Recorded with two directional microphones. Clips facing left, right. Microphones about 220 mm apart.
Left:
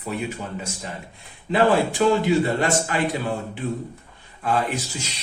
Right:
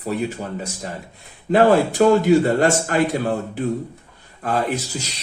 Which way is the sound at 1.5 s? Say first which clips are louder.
Right 4 dB; 45° right (ahead or behind).